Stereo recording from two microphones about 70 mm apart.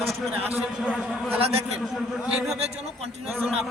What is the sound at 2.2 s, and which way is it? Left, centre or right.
Speech, centre.